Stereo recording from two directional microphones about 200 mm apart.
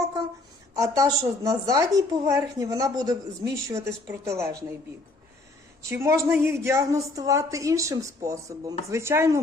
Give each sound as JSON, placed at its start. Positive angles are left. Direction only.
{"t": 0.8, "sound": "a woman's voice", "side_deg": -15}
{"t": 5.8, "sound": "a woman's voice", "side_deg": -15}